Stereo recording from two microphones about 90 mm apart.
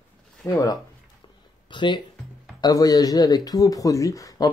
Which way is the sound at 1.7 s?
60° left (ahead or behind).